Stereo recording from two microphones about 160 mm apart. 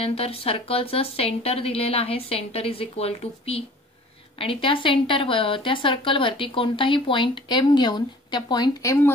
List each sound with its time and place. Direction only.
0.0 s a woman's voice: 35° left (ahead or behind); by 9.1 s 20° left (ahead or behind)